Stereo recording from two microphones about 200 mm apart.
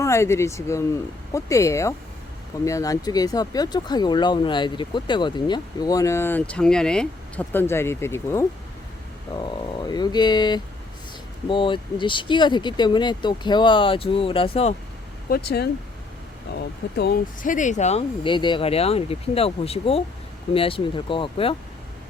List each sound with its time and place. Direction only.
0.0 s speech: 15° left (ahead or behind); by 14.8 s 30° left (ahead or behind)
15.3 s speech: 55° left (ahead or behind); by 21.5 s 25° left (ahead or behind)